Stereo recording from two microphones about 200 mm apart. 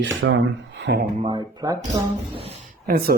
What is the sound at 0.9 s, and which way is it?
Speech, 55° right (ahead or behind).